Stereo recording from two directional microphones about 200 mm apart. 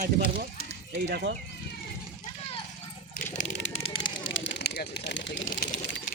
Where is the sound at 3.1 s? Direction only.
35° left (ahead or behind).